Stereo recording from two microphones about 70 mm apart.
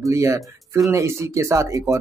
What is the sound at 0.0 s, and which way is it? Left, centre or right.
Speech, right.